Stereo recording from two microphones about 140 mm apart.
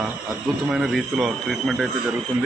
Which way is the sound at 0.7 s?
Centre (ahead or behind).